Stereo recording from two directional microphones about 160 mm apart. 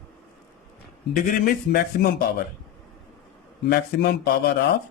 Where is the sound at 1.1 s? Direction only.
65° left (ahead or behind).